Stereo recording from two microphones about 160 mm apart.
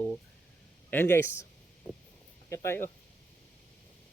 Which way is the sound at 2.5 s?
15° left (ahead or behind).